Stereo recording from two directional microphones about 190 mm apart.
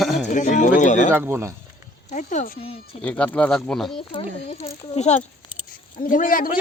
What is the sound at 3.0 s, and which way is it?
Speech, 5° left (ahead or behind).